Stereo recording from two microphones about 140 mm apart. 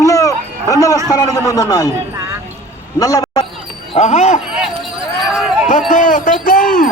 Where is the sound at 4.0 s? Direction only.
50° left (ahead or behind).